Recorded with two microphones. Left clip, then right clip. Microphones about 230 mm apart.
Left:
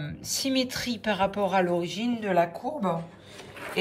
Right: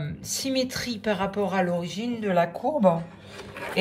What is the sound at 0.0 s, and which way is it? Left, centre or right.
Speech, centre.